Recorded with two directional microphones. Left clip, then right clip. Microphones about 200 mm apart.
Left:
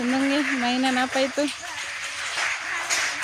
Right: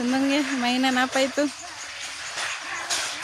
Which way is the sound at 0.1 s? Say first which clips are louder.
Even; 5° right (ahead or behind).